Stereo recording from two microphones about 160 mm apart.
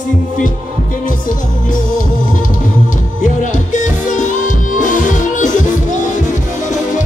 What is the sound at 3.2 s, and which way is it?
Music, 50° left (ahead or behind).